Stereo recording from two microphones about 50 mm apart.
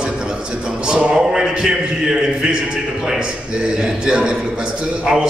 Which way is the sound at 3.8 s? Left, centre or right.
Centre.